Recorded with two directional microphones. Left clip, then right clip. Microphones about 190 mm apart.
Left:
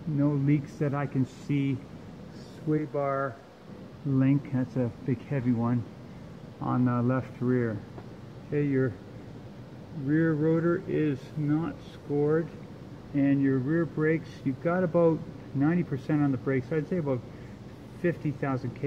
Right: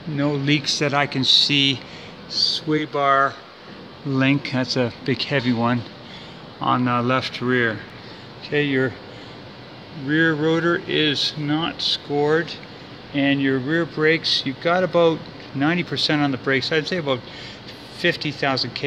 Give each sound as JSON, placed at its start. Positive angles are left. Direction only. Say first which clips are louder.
{"t": 0.2, "sound": "speech", "louder": "right 7 dB", "side_deg": -20}
{"t": 10.0, "sound": "speech", "louder": "right 7 dB", "side_deg": -15}